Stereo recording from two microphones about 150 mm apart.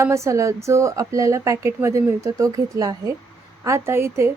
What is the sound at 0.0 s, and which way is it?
A woman's voice, 20° right (ahead or behind).